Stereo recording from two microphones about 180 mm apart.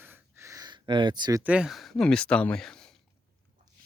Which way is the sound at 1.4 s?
5° right (ahead or behind).